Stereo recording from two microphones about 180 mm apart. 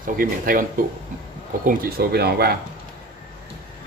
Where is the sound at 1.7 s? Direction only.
55° right (ahead or behind).